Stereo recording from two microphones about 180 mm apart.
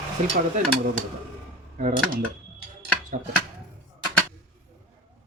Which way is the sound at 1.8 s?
50° right (ahead or behind).